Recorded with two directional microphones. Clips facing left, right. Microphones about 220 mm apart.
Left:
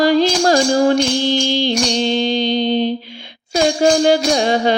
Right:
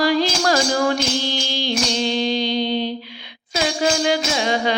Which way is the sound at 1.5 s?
25° left (ahead or behind).